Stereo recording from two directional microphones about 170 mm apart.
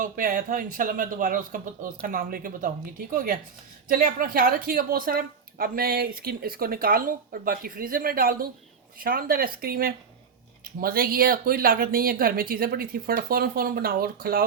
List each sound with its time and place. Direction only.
0.0 s a woman's voice: 55° right (ahead or behind)